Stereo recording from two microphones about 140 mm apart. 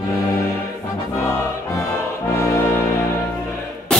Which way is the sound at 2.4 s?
20° left (ahead or behind).